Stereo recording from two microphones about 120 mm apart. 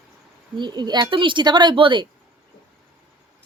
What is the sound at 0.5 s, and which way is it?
A woman's voice, 35° right (ahead or behind).